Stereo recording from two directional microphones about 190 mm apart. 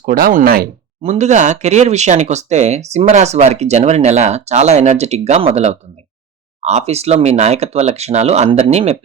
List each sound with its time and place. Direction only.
0.0 s speech: 50° right (ahead or behind)
1.0 s speech: 35° right (ahead or behind)